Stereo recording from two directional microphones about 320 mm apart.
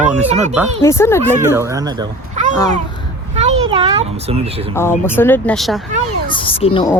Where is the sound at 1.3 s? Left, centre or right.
Centre.